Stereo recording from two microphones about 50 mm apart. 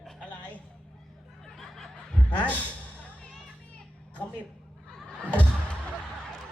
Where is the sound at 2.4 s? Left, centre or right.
Left.